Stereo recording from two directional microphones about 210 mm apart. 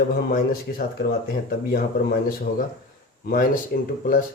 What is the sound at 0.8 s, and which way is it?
Speech, 45° left (ahead or behind).